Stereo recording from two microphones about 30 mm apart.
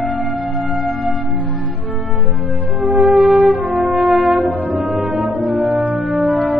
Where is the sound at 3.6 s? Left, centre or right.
Right.